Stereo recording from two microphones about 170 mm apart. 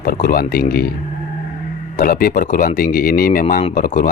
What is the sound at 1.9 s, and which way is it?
Speech, 60° left (ahead or behind).